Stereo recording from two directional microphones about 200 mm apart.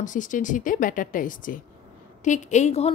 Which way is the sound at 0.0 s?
40° left (ahead or behind).